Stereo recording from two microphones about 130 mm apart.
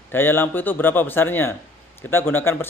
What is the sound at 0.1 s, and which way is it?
A man's voice, 15° left (ahead or behind).